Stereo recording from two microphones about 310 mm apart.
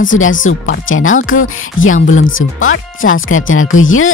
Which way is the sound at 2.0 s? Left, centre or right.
Left.